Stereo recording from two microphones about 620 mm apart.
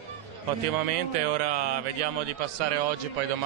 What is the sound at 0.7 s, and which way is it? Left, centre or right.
A man's voice, right.